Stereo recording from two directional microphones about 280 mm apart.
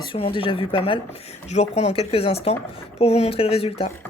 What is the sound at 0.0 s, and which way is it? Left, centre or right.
Speech, centre.